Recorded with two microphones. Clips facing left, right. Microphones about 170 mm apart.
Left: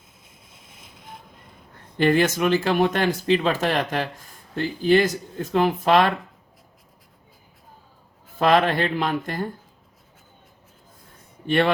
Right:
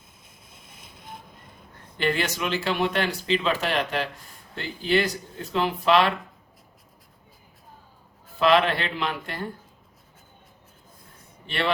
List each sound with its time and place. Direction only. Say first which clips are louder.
2.0 s speech: left 7 dB; 45° left (ahead or behind)
8.4 s speech: left 2 dB; 45° left (ahead or behind)
11.4 s speech: left 8 dB; 50° left (ahead or behind)